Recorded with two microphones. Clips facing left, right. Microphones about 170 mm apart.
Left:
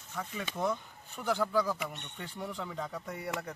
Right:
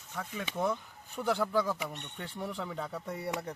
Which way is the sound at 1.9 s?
Centre (ahead or behind).